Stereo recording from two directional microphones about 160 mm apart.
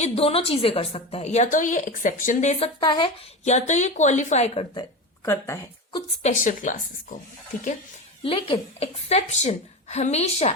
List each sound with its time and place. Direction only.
0.0 s a woman's voice: 35° left (ahead or behind)
2.8 s a woman's voice: 30° left (ahead or behind)
3.4 s a woman's voice: 45° left (ahead or behind)
5.2 s speech: 15° left (ahead or behind)
6.2 s a woman's voice: 55° left (ahead or behind)
8.2 s a woman's voice: 35° left (ahead or behind)